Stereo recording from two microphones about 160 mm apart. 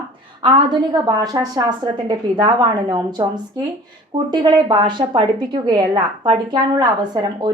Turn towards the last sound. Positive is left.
turn(degrees=-25)  # may be behind; listen again after turning